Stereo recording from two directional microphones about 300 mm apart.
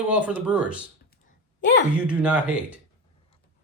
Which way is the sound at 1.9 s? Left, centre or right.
Centre.